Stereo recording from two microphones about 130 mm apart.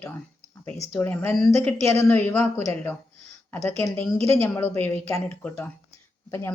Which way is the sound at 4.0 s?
15° left (ahead or behind).